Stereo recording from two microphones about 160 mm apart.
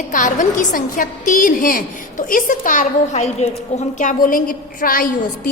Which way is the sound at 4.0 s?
55° left (ahead or behind).